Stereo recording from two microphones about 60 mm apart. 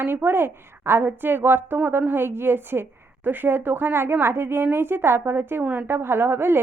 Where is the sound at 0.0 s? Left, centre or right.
Right.